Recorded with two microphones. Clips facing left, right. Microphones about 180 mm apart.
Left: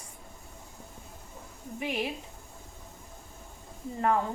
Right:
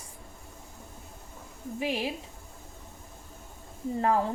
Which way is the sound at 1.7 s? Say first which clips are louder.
Right 2 dB; 30° right (ahead or behind).